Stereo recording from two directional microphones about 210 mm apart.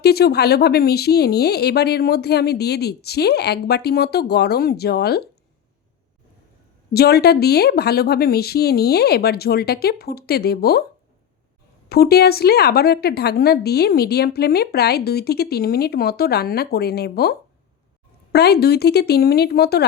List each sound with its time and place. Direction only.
0.0 s a woman's voice: 50° left (ahead or behind)
6.9 s a woman's voice: 50° left (ahead or behind)
11.9 s a woman's voice: 50° left (ahead or behind)